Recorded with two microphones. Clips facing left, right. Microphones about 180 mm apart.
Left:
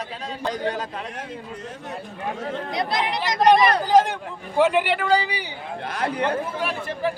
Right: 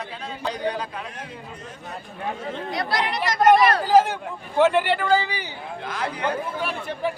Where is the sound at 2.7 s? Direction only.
20° left (ahead or behind).